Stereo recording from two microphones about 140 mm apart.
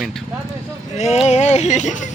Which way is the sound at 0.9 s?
55° left (ahead or behind).